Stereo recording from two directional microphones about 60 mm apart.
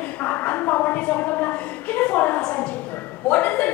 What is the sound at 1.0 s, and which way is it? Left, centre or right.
A woman's voice, left.